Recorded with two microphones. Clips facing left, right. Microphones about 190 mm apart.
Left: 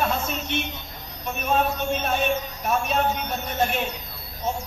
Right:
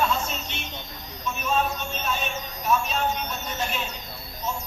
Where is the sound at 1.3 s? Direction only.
55° left (ahead or behind).